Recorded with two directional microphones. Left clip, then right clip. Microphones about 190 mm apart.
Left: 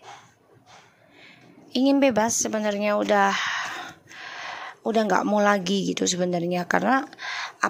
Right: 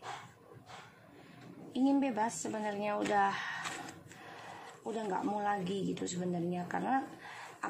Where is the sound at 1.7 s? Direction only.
45° left (ahead or behind).